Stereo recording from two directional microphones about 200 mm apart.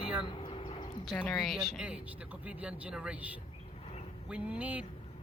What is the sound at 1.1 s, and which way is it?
Speech, 10° left (ahead or behind).